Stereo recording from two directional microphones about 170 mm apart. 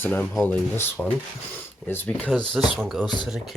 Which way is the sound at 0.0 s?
5° left (ahead or behind).